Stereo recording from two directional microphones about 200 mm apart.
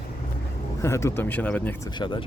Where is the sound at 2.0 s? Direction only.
25° left (ahead or behind).